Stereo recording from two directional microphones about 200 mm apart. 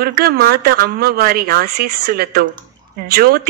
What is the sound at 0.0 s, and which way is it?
A woman's voice, 50° right (ahead or behind).